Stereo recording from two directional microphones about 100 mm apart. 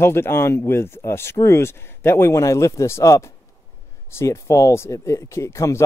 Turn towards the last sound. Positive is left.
turn(degrees=30)  # may be behind; listen again after turning